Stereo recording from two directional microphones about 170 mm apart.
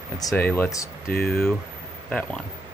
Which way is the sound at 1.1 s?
60° left (ahead or behind).